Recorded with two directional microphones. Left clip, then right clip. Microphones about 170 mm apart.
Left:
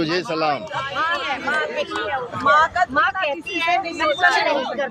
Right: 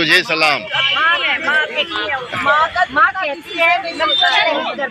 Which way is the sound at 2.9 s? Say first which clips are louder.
Right 5 dB; 35° left (ahead or behind).